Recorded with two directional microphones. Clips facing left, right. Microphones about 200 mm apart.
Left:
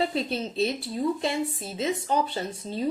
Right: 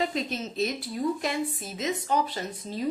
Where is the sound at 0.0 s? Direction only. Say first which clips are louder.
Left 2 dB; 35° left (ahead or behind).